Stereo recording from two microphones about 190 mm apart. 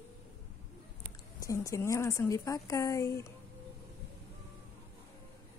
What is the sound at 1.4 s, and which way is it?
A woman's voice, 15° left (ahead or behind).